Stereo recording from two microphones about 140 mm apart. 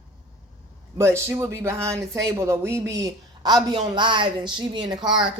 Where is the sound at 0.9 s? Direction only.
20° right (ahead or behind).